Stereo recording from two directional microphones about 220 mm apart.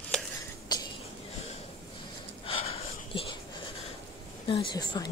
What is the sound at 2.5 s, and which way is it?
Snort, 25° left (ahead or behind).